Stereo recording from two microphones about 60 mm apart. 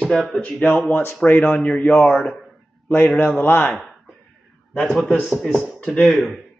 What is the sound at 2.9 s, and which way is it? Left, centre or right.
Speech, left.